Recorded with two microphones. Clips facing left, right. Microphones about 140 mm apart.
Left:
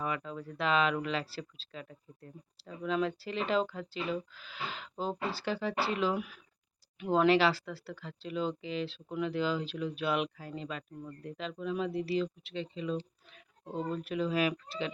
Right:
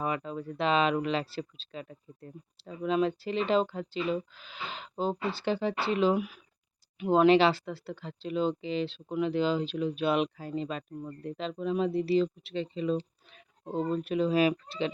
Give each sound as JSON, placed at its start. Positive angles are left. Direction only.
{"t": 0.0, "sound": "speech", "side_deg": -25}